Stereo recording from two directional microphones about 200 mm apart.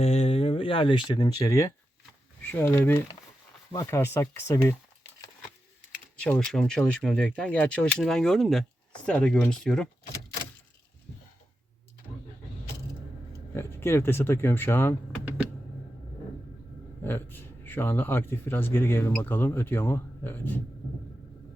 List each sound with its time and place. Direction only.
0.0 s speech: 30° left (ahead or behind); by 4.7 s 15° left (ahead or behind)
6.2 s speech: 5° left (ahead or behind)
13.5 s speech: 10° left (ahead or behind)
17.0 s a man's voice: 10° left (ahead or behind)